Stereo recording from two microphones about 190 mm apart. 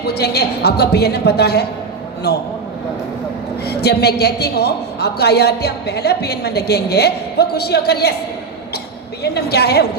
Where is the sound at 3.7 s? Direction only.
60° left (ahead or behind).